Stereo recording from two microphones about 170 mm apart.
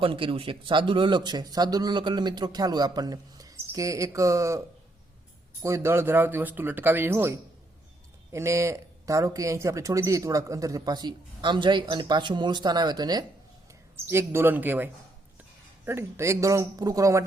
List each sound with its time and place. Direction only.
0.0 s speech: 30° right (ahead or behind)
5.6 s speech: 15° right (ahead or behind)